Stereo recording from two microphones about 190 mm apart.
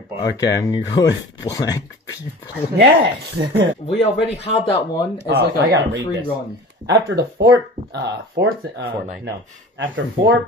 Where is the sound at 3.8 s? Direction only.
30° left (ahead or behind).